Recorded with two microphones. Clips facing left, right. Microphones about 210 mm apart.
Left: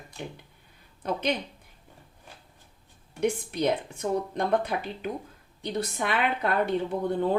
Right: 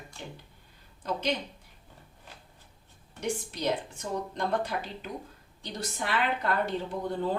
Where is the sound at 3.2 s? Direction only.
60° left (ahead or behind).